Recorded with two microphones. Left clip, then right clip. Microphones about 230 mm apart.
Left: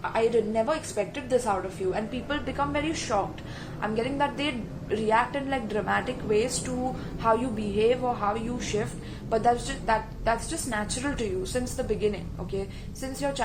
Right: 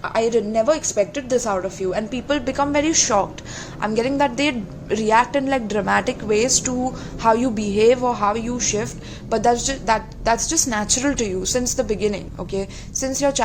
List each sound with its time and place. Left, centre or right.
0.0 s a woman's voice: right